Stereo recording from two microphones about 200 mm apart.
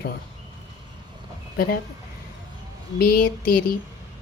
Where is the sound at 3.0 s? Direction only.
50° left (ahead or behind).